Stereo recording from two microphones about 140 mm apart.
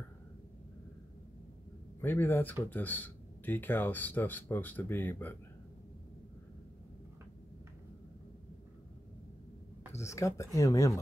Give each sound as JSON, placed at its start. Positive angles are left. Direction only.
{"t": 2.0, "sound": "speech", "side_deg": 15}
{"t": 9.9, "sound": "speech", "side_deg": 20}